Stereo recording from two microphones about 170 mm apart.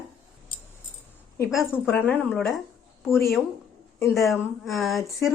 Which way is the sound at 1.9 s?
10° left (ahead or behind).